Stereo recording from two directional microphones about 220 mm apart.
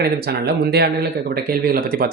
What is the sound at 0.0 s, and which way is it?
Speech, 45° right (ahead or behind).